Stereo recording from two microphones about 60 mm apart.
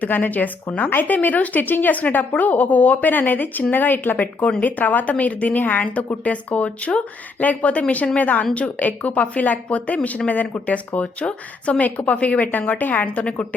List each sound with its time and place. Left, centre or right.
0.0 s speech: left